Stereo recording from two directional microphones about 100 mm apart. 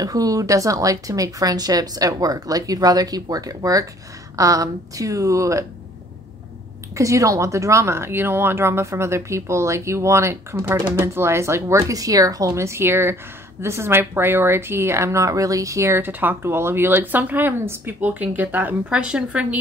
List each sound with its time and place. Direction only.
0.0 s speech: 35° right (ahead or behind)
7.0 s speech: 35° right (ahead or behind); by 19.6 s 10° right (ahead or behind)